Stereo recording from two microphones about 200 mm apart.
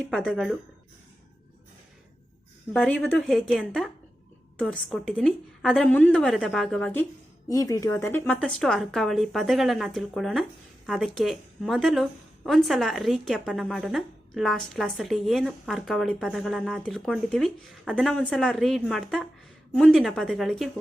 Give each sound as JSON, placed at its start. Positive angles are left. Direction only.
{"t": 0.0, "sound": "a woman's voice", "side_deg": 5}
{"t": 2.7, "sound": "a woman's voice", "side_deg": 5}